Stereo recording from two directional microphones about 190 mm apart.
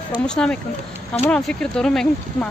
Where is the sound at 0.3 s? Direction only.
5° left (ahead or behind).